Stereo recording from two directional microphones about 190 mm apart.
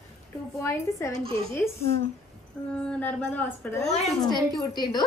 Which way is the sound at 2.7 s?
5° left (ahead or behind).